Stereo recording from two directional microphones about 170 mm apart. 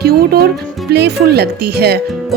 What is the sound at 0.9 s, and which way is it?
Speech, 80° right.